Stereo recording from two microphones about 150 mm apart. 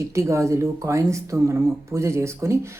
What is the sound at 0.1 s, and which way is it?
Speech, 20° right (ahead or behind).